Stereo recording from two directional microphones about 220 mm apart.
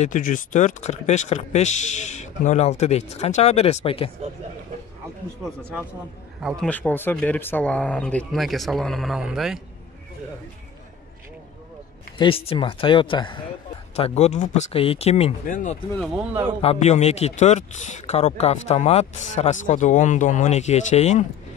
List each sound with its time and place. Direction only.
0.0 s speech: 35° left (ahead or behind)
5.4 s speech: 10° right (ahead or behind)
6.6 s speech: 10° left (ahead or behind)
12.4 s speech: 25° left (ahead or behind)